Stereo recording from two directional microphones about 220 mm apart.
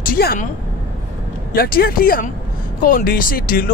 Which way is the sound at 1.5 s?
45° left (ahead or behind).